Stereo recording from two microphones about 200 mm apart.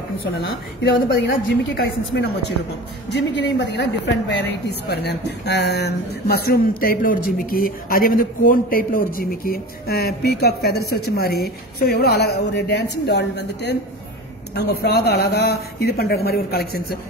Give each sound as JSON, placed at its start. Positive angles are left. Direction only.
{"t": 0.8, "sound": "a woman's voice", "side_deg": 55}